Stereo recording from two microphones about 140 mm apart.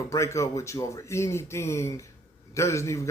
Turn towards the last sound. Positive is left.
turn(degrees=20)  # may be behind; listen again after turning